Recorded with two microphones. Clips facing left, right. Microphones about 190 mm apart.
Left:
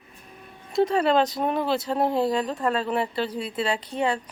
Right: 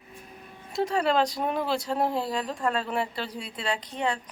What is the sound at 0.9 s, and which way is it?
Speech, 25° left (ahead or behind).